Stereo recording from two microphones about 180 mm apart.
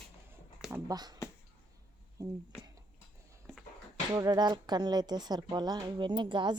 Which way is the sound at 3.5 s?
Centre (ahead or behind).